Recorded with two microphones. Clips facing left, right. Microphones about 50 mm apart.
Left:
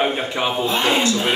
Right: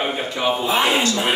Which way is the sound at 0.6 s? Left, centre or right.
Centre.